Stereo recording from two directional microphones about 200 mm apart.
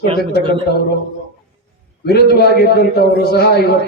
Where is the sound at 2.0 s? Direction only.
50° left (ahead or behind).